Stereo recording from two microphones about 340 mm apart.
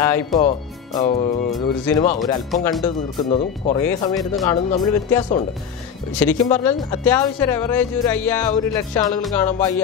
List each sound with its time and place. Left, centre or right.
0.0 s speech: centre
2.5 s speech: centre
2.8 s speech: centre